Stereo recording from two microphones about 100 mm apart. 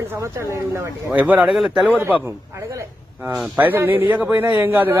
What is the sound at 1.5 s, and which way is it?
Speech, 5° right (ahead or behind).